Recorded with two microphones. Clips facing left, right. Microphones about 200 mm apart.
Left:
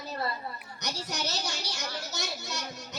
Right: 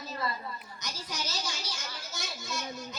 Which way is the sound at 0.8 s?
70° left (ahead or behind).